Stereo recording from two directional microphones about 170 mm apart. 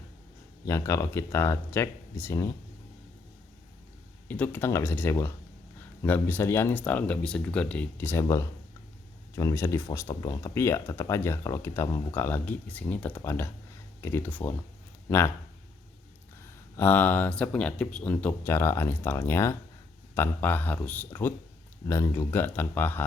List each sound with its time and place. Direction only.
0.6 s speech: 15° left (ahead or behind)
4.3 s speech: 10° left (ahead or behind)
16.7 s speech: 10° left (ahead or behind)